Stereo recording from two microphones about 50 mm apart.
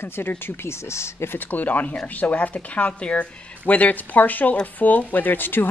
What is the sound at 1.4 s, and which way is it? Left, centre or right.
Speech, left.